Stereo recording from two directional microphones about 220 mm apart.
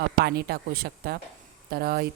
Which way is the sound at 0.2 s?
45° right (ahead or behind).